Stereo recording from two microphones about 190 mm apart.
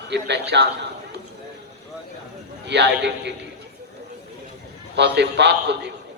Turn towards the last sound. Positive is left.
turn(degrees=-60)  # may be behind; listen again after turning